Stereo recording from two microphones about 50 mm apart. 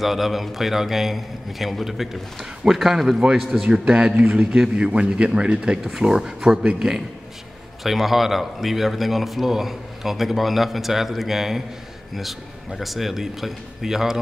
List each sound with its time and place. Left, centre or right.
0.0 s a man's voice: centre
3.8 s a man's voice: right
5.9 s speech: centre
7.8 s a man's voice: centre